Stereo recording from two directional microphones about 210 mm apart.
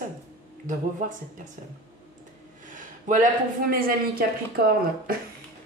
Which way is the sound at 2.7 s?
40° right (ahead or behind).